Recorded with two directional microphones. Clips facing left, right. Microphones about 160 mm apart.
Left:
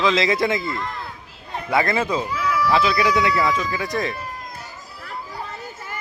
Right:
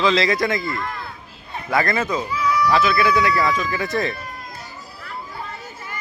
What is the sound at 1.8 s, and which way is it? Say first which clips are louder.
Speech: even; 10° left (ahead or behind).